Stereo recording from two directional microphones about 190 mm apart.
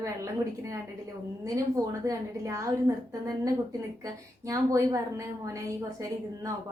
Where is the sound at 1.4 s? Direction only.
15° right (ahead or behind).